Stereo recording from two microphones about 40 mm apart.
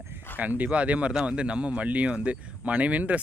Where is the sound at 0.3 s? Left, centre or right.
Right.